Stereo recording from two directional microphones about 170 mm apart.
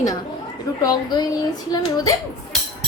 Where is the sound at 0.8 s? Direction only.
25° left (ahead or behind).